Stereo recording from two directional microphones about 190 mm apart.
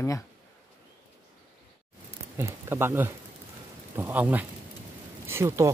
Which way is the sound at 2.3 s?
15° right (ahead or behind).